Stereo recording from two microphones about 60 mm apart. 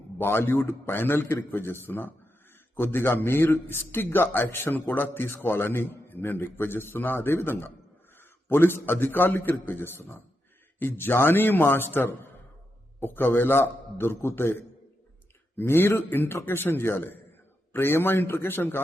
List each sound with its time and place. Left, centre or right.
0.2 s a man's voice: left